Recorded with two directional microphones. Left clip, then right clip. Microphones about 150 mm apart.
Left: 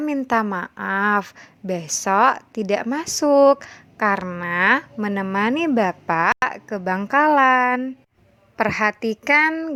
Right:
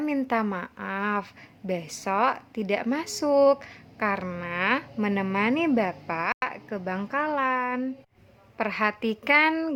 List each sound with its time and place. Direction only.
0.0 s a woman's voice: 35° left (ahead or behind); by 4.9 s 50° left (ahead or behind)
4.9 s a woman's voice: 35° left (ahead or behind)
9.5 s speech: 15° left (ahead or behind)